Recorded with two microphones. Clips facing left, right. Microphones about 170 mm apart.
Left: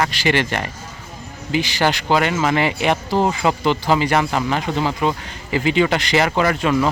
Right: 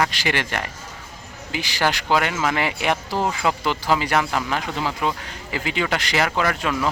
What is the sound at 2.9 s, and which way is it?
Speech, 25° left (ahead or behind).